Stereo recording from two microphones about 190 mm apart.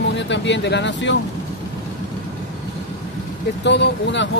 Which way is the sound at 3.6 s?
65° left (ahead or behind).